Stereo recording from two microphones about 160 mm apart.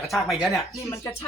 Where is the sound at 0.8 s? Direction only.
20° left (ahead or behind).